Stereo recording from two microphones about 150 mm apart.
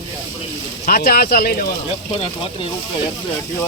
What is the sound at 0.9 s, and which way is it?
Speech, 85° left.